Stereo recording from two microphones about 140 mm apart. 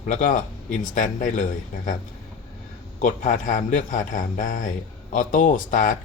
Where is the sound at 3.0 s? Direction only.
70° left (ahead or behind).